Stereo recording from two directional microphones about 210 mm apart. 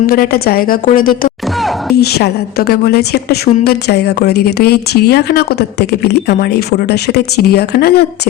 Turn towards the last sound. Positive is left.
turn(degrees=50)  # may be behind; listen again after turning